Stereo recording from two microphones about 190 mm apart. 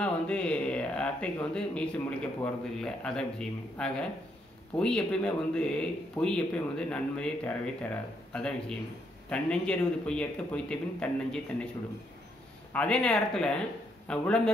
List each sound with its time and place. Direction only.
0.0 s speech: 5° left (ahead or behind)
12.7 s speech: 5° left (ahead or behind)